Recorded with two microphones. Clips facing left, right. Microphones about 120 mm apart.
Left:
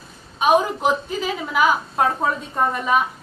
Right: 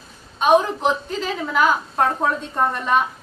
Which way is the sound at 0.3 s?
10° left (ahead or behind).